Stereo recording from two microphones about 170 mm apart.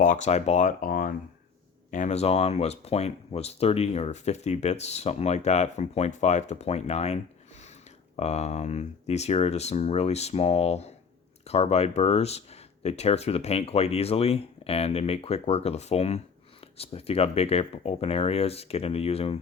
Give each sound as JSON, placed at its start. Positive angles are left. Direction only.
{"t": 0.0, "sound": "speech", "side_deg": 45}